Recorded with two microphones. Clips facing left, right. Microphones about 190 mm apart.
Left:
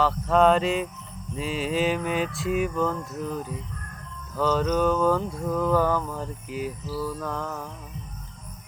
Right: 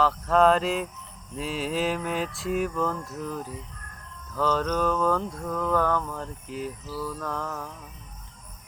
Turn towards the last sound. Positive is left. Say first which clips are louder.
# left 1 dB
turn(degrees=0)  # may be behind; listen again after turning